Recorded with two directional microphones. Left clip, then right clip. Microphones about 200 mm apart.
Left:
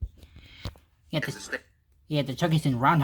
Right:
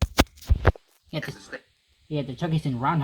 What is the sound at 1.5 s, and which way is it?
Speech, 90° left.